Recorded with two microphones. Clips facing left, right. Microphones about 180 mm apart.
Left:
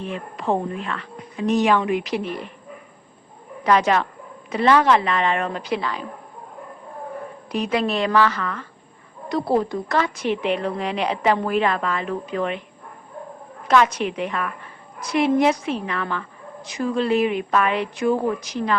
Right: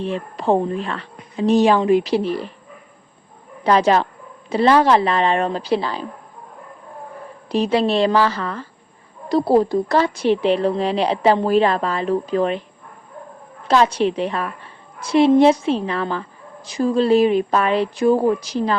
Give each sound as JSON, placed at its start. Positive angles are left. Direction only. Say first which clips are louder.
{"t": 0.0, "sound": "a woman's voice", "louder": "right 5 dB", "side_deg": -30}
{"t": 3.6, "sound": "a woman's voice", "louder": "right 3 dB", "side_deg": -30}
{"t": 7.5, "sound": "a woman's voice", "louder": "right 5 dB", "side_deg": -30}
{"t": 13.7, "sound": "a woman's voice", "louder": "right 2 dB", "side_deg": -30}